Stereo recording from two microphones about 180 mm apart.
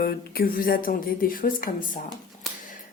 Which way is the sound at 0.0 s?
55° left (ahead or behind).